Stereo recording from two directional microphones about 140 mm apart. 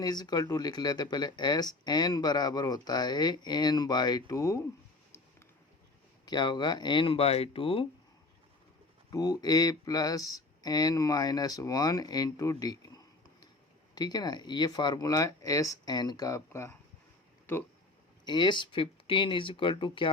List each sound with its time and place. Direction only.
0.0 s speech: 30° left (ahead or behind)
6.2 s speech: 30° left (ahead or behind)
9.0 s speech: 25° left (ahead or behind)
17.4 s a sound: 15° left (ahead or behind)
18.3 s speech: 35° left (ahead or behind)